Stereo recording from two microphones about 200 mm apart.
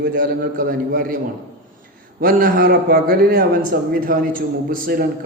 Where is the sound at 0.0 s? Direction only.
45° right (ahead or behind).